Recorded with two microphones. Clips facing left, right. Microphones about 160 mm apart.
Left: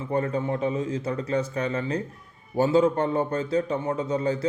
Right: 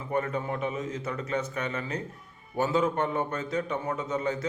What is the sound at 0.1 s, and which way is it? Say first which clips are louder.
A man's voice: left 4 dB; 30° left (ahead or behind).